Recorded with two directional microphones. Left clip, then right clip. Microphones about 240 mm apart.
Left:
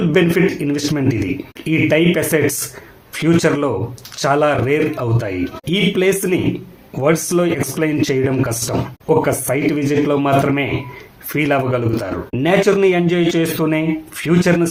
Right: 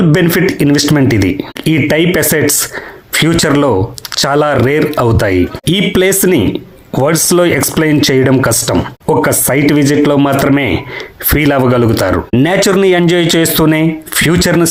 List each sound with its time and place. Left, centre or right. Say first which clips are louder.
0.1 s speech: right 4 dB; right